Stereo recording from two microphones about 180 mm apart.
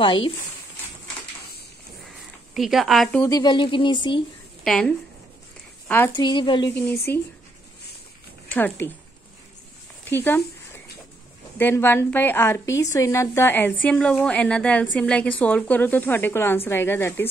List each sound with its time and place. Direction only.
0.0 s speech: 30° left (ahead or behind)
2.5 s speech: centre (ahead or behind)
3.3 s speech: 20° left (ahead or behind)
4.6 s a woman's voice: 5° left (ahead or behind)
6.1 s speech: 25° left (ahead or behind)
6.7 s a woman's voice: 10° left (ahead or behind)
8.5 s speech: 10° left (ahead or behind)
10.0 s a sound: 10° left (ahead or behind)
11.5 s a woman's voice: 10° left (ahead or behind)